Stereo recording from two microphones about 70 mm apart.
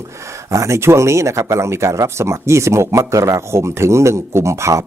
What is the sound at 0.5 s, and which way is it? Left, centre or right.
Speech, right.